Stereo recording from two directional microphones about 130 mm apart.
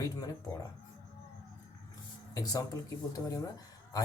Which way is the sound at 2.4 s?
25° left (ahead or behind).